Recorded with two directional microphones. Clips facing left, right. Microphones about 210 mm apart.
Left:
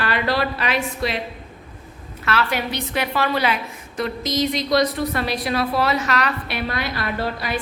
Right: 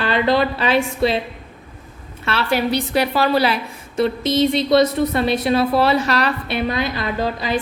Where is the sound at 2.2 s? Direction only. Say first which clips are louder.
Right 3 dB; 25° right (ahead or behind).